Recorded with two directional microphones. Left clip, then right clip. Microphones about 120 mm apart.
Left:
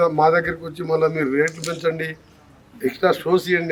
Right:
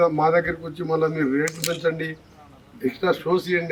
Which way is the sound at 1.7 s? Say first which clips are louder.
Left 1 dB; 10° left (ahead or behind).